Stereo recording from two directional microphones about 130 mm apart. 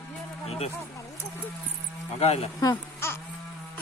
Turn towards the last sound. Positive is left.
turn(degrees=20)  # may be behind; listen again after turning